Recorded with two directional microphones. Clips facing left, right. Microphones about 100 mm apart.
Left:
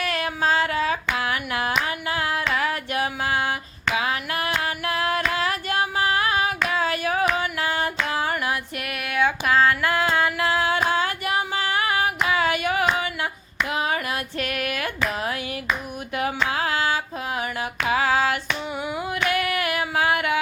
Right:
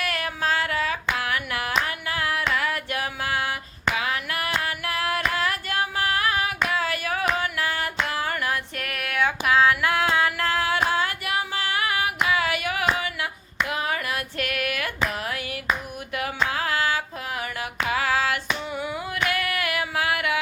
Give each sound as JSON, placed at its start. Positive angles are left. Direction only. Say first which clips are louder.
{"t": 0.0, "sound": "female singing", "louder": "left 3 dB", "side_deg": 25}
{"t": 1.2, "sound": "hands", "louder": "left 2 dB", "side_deg": 25}
{"t": 1.8, "sound": "a sound", "louder": "left 2 dB", "side_deg": 25}
{"t": 2.6, "sound": "female singing", "louder": "left 3 dB", "side_deg": 25}
{"t": 6.7, "sound": "singing", "louder": "left 2 dB", "side_deg": 25}
{"t": 7.3, "sound": "music", "louder": "left 2 dB", "side_deg": 20}
{"t": 8.9, "sound": "music", "louder": "left 2 dB", "side_deg": 5}
{"t": 10.4, "sound": "music", "louder": "left 2 dB", "side_deg": 20}
{"t": 10.8, "sound": "a sound", "louder": "left 2 dB", "side_deg": 25}
{"t": 13.0, "sound": "hands", "louder": "left 2 dB", "side_deg": 30}
{"t": 13.7, "sound": "female singing", "louder": "left 3 dB", "side_deg": 25}
{"t": 15.1, "sound": "a sound", "louder": "left 3 dB", "side_deg": 25}
{"t": 17.8, "sound": "female singing", "louder": "left 3 dB", "side_deg": 25}
{"t": 18.8, "sound": "a sound", "louder": "left 2 dB", "side_deg": 20}